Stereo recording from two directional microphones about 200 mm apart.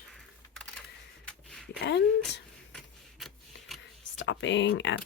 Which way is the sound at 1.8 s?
60° left (ahead or behind).